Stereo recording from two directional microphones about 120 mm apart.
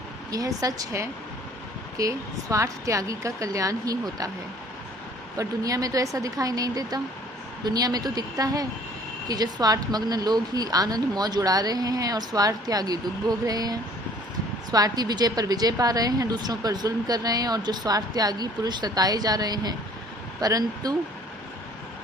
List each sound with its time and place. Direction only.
0.3 s a woman's voice: 30° right (ahead or behind)
5.4 s a woman's voice: 30° right (ahead or behind)